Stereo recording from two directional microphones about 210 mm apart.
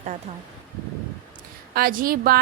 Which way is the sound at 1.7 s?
45° right (ahead or behind).